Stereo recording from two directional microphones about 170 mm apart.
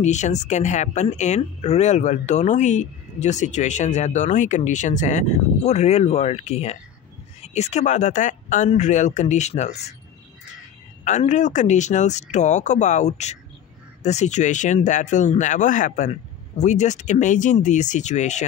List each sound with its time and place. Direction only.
0.0 s speech: 45° left (ahead or behind)
11.1 s speech: 45° left (ahead or behind)